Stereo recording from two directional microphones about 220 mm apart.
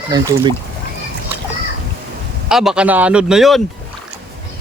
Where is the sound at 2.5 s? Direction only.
Centre (ahead or behind).